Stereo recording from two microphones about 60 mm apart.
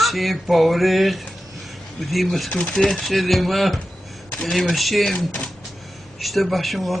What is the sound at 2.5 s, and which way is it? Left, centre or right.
Speech, centre.